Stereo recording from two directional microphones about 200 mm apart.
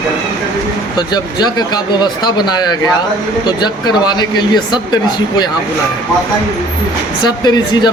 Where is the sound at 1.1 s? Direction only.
20° left (ahead or behind).